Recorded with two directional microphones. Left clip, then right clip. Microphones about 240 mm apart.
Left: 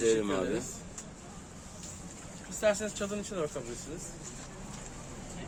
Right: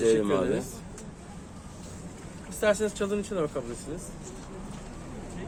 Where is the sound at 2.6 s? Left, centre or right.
Right.